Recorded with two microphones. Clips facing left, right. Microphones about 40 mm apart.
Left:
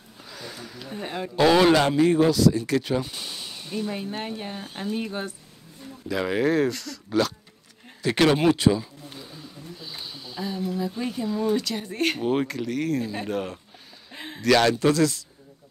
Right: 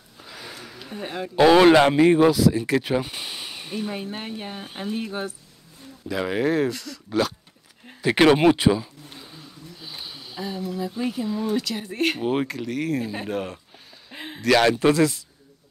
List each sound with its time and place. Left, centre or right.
0.2 s a sound: centre
1.3 s speech: centre
2.3 s speech: centre
3.9 s speech: centre
4.9 s speech: centre
8.0 s a sound: right
10.7 s speech: centre
14.1 s a sound: centre
14.8 s speech: right